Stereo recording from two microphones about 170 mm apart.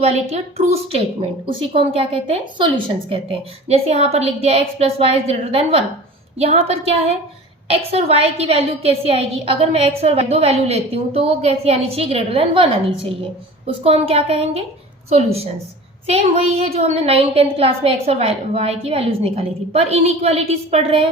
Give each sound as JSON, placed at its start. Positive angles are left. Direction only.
{"t": 0.0, "sound": "a woman's voice", "side_deg": -40}
{"t": 13.7, "sound": "a woman's voice", "side_deg": -35}
{"t": 16.0, "sound": "a woman's voice", "side_deg": -35}